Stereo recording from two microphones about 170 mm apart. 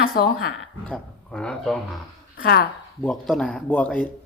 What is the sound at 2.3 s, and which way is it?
Speech, 65° left (ahead or behind).